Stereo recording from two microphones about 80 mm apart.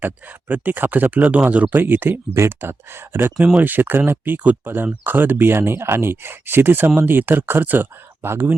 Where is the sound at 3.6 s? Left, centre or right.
Right.